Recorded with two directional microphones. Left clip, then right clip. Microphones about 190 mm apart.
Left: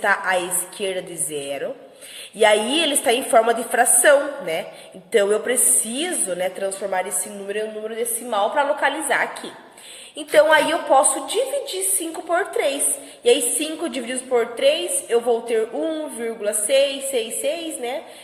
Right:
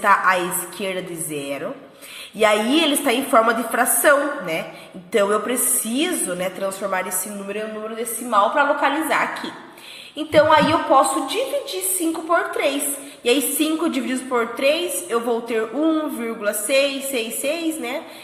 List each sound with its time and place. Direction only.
0.0 s a woman's voice: 25° left (ahead or behind)